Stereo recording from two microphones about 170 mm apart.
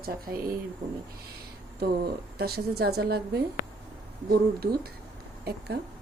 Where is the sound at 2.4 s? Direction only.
70° right (ahead or behind).